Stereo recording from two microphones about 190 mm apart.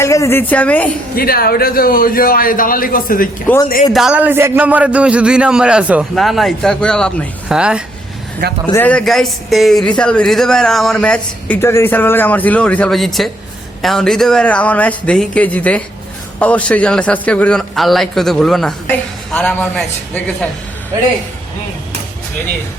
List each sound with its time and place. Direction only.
0.0 s speech: 15° left (ahead or behind)
1.1 s a man's voice: 50° left (ahead or behind)
3.4 s speech: 10° left (ahead or behind)
3.9 s speech: 5° right (ahead or behind)
8.7 s speech: 10° left (ahead or behind)